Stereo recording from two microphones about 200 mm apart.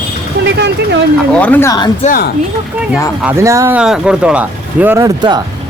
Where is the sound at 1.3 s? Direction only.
5° left (ahead or behind).